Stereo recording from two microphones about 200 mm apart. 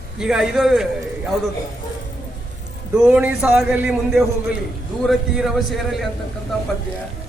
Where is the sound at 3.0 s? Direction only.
5° right (ahead or behind).